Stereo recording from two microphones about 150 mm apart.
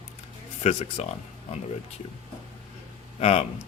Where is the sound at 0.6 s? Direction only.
45° left (ahead or behind).